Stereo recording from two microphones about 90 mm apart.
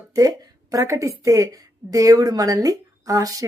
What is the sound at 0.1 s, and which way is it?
Speech, 45° right (ahead or behind).